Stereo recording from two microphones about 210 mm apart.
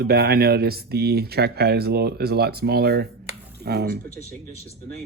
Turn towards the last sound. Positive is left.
turn(degrees=-50)  # may be behind; listen again after turning